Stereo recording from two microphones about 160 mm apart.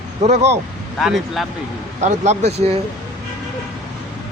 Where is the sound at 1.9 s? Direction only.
45° right (ahead or behind).